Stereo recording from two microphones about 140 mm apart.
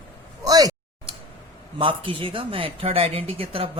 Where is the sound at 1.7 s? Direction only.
40° right (ahead or behind).